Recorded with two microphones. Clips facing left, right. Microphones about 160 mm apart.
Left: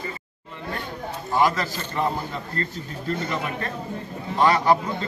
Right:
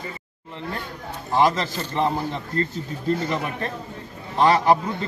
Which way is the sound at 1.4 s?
25° right (ahead or behind).